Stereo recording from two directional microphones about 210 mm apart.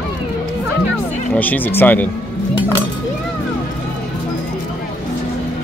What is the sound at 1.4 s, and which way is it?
Speech, 10° left (ahead or behind).